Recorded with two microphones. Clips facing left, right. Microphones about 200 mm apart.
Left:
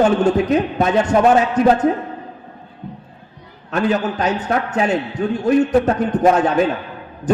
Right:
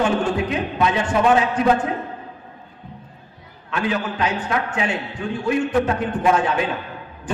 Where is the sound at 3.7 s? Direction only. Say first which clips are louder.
Left 5 dB; 40° left (ahead or behind).